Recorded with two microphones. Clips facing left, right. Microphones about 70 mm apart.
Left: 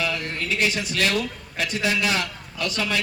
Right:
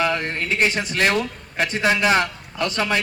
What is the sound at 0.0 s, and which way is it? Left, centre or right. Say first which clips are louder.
A man's voice: right 5 dB; right.